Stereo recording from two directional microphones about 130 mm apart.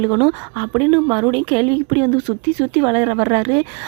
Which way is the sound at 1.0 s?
20° right (ahead or behind).